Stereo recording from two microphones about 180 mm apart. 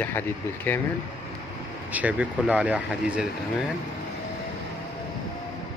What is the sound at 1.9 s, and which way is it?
Speech, 10° right (ahead or behind).